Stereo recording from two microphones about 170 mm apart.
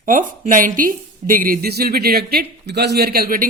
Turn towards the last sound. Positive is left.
turn(degrees=-55)  # may be behind; listen again after turning